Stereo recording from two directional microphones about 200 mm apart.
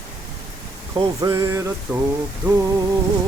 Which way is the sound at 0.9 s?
20° right (ahead or behind).